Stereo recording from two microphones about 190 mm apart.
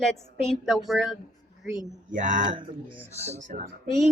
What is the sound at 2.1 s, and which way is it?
Speech, 40° right (ahead or behind).